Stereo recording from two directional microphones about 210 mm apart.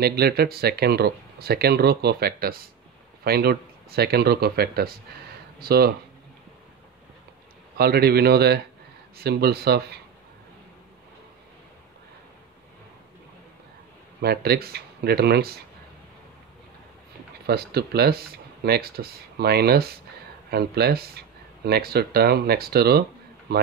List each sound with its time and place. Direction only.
0.0 s speech: 50° right (ahead or behind)
7.7 s speech: 50° right (ahead or behind)
14.2 s speech: 50° right (ahead or behind)
17.5 s speech: 50° right (ahead or behind)